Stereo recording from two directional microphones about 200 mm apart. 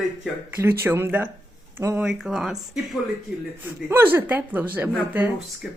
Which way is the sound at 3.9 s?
10° right (ahead or behind).